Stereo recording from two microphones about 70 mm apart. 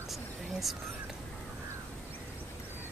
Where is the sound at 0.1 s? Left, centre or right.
Centre.